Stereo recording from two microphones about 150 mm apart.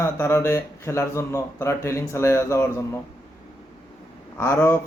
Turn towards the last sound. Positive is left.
turn(degrees=15)  # may be behind; listen again after turning